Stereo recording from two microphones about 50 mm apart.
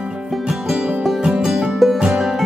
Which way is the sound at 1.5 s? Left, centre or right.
Centre.